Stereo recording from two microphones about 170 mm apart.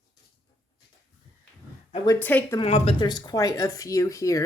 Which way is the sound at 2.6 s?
35° left (ahead or behind).